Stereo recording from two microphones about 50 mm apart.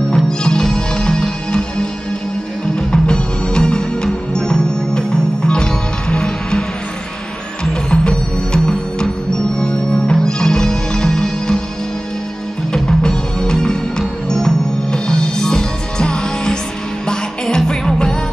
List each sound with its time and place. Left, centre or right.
0.1 s music: centre
7.9 s music: centre
12.7 s music: centre